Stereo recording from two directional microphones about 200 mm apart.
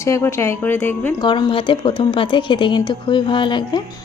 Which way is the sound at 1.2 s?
25° left (ahead or behind).